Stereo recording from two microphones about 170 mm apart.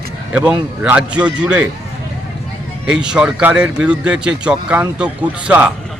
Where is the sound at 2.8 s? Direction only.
5° right (ahead or behind).